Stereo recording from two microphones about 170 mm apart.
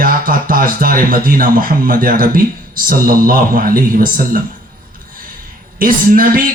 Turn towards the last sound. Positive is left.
turn(degrees=-55)  # may be behind; listen again after turning